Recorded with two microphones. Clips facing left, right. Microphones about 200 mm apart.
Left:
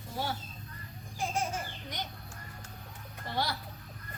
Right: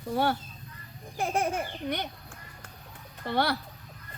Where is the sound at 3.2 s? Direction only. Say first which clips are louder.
Right 7 dB; 60° right (ahead or behind).